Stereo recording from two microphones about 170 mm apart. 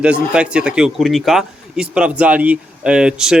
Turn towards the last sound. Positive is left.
turn(degrees=-5)  # may be behind; listen again after turning